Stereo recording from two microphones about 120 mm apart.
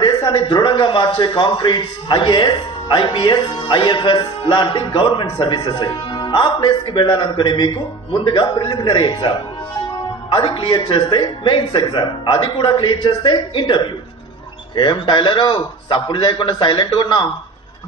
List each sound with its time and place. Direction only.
0.0 s a man's voice: 45° left (ahead or behind)
10.3 s a man's voice: 45° left (ahead or behind)